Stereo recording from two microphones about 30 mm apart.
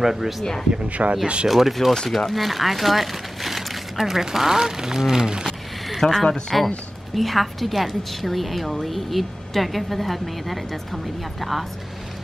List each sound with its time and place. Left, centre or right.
0.0 s speech: centre
0.8 s speech: right
1.2 s speech: right
1.5 s a woman's voice: centre
5.9 s a woman's voice: centre